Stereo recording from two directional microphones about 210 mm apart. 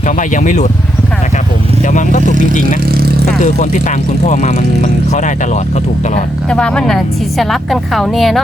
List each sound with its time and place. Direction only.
0.2 s speech: 35° left (ahead or behind)
1.9 s speech: 35° left (ahead or behind)
4.3 s speech: 35° left (ahead or behind)
6.5 s a woman's voice: 5° left (ahead or behind)